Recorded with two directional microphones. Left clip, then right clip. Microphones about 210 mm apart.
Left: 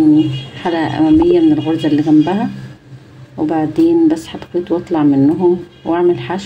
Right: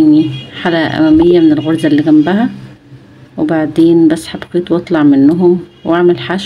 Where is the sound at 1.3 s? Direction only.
20° right (ahead or behind).